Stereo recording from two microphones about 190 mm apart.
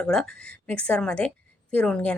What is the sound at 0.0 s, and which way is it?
A woman's voice, centre (ahead or behind).